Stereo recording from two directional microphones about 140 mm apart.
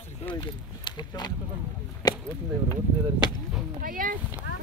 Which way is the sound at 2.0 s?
30° left (ahead or behind).